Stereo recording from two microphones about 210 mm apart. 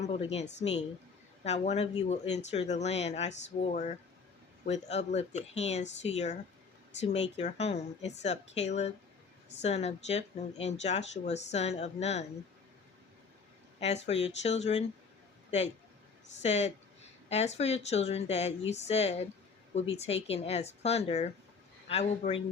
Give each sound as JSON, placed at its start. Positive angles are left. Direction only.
{"t": 0.0, "sound": "a woman's voice", "side_deg": 30}
{"t": 7.3, "sound": "speech", "side_deg": 30}
{"t": 13.7, "sound": "speech", "side_deg": 30}
{"t": 16.4, "sound": "speech", "side_deg": 30}
{"t": 20.2, "sound": "speech", "side_deg": 30}